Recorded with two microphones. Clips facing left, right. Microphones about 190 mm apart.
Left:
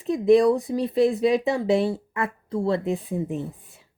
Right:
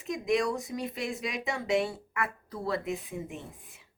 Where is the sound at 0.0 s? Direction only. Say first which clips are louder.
Left 11 dB; 35° left (ahead or behind).